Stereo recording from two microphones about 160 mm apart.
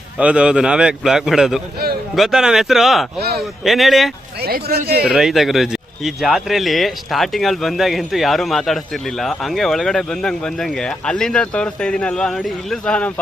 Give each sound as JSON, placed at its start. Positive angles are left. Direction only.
{"t": 0.2, "sound": "speech", "side_deg": -5}
{"t": 3.2, "sound": "speech", "side_deg": -80}
{"t": 3.6, "sound": "speech", "side_deg": 0}
{"t": 4.4, "sound": "speech", "side_deg": -75}
{"t": 5.0, "sound": "speech", "side_deg": 0}